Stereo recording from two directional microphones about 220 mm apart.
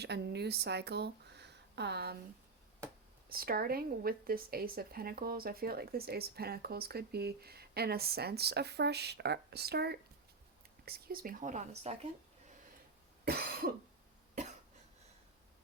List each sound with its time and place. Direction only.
0.0 s speech: 50° right (ahead or behind)
3.2 s a woman's voice: 40° right (ahead or behind)
13.2 s cough: 45° right (ahead or behind)